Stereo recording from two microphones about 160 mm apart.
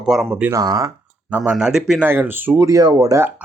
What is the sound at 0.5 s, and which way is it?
Speech, 20° right (ahead or behind).